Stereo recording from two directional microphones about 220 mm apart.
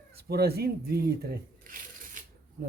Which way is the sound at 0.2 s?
45° right (ahead or behind).